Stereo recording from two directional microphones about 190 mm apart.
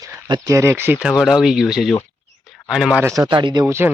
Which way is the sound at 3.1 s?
20° right (ahead or behind).